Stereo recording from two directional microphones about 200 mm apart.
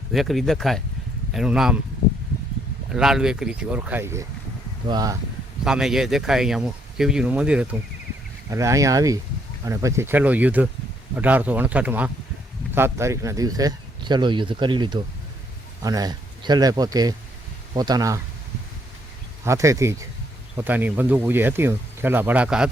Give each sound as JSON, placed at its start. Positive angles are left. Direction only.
{"t": 0.1, "sound": "speech", "side_deg": 0}
{"t": 2.9, "sound": "speech", "side_deg": -5}
{"t": 5.6, "sound": "speech", "side_deg": -5}
{"t": 19.5, "sound": "speech", "side_deg": -15}